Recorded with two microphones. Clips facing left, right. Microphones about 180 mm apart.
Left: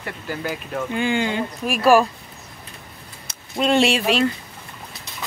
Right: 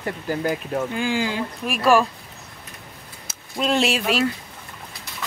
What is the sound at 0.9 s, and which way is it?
Speech, centre (ahead or behind).